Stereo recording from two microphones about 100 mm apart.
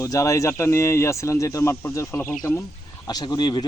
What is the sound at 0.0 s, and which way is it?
Speech, 35° left (ahead or behind).